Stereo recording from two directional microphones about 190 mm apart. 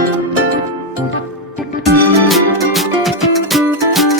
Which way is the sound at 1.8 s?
Centre (ahead or behind).